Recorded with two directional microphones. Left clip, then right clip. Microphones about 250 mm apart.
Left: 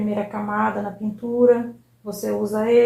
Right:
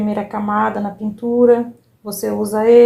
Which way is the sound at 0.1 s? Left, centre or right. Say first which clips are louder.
Right 6 dB; right.